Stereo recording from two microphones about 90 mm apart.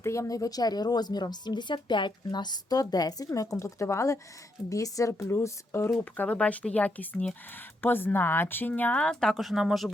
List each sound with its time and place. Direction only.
0.0 s a woman's voice: 35° left (ahead or behind)
6.1 s speech: 15° left (ahead or behind); by 9.9 s 5° right (ahead or behind)